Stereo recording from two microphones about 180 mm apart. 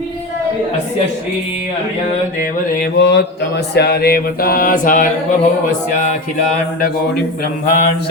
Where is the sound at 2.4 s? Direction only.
65° left (ahead or behind); by 5.0 s 50° left (ahead or behind).